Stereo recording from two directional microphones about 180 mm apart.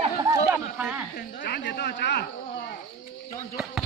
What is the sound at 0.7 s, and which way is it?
Speech, 5° right (ahead or behind).